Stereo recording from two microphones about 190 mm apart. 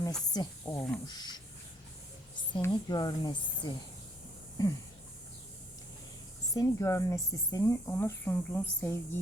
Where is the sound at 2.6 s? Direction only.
20° left (ahead or behind).